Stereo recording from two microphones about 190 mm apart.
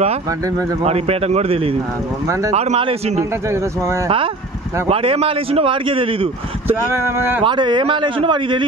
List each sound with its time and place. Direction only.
0.8 s a man's voice: 35° right (ahead or behind)
3.2 s speech: 15° right (ahead or behind)
4.8 s a man's voice: 30° right (ahead or behind)
6.9 s speech: 10° right (ahead or behind)
7.4 s a man's voice: 25° right (ahead or behind)